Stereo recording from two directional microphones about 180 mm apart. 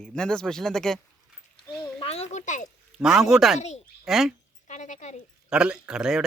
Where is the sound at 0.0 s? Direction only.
5° left (ahead or behind).